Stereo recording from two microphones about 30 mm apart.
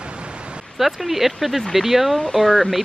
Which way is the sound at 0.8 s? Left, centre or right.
Centre.